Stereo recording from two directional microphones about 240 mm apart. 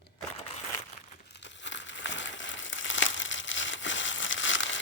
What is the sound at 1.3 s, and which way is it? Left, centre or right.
Crumpling, left.